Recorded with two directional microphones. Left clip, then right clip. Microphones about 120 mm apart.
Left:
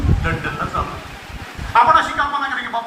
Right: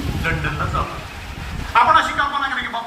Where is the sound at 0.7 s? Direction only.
20° left (ahead or behind).